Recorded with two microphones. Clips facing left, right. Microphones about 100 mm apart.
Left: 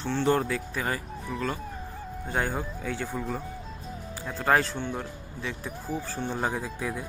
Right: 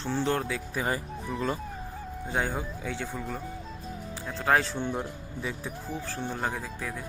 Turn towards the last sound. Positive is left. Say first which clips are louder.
# left 3 dB
turn(degrees=5)  # may be behind; listen again after turning